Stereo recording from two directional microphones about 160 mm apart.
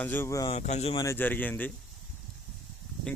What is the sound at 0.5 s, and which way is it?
Speech, 45° left (ahead or behind).